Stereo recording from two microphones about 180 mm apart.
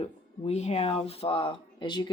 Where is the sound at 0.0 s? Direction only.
35° left (ahead or behind).